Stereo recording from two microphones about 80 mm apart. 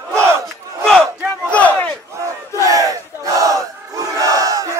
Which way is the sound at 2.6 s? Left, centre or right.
Right.